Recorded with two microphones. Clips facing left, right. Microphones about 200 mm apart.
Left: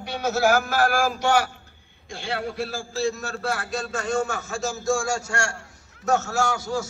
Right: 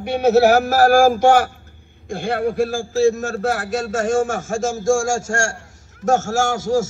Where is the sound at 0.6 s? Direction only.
40° right (ahead or behind).